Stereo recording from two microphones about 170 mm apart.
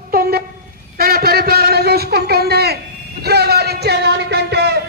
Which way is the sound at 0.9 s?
60° right (ahead or behind).